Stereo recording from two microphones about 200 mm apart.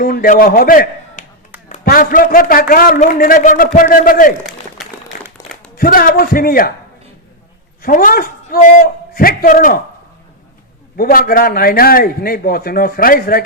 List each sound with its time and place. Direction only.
0.0 s a man's voice: 45° left (ahead or behind)
4.4 s a sound: centre (ahead or behind)
5.7 s a man's voice: 45° left (ahead or behind)
7.8 s a man's voice: 45° left (ahead or behind)
10.9 s a man's voice: 45° left (ahead or behind)